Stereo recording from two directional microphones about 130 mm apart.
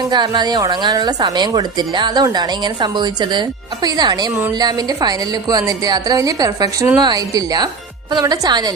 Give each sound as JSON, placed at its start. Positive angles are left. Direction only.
{"t": 0.1, "sound": "a woman's voice", "side_deg": -35}